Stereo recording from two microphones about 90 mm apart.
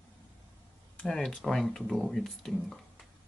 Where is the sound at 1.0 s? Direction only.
10° left (ahead or behind).